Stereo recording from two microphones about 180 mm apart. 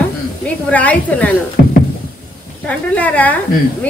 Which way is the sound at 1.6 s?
55° left (ahead or behind).